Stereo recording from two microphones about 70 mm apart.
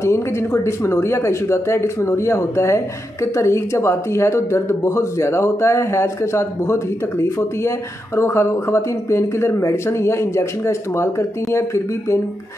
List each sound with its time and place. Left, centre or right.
0.0 s speech: left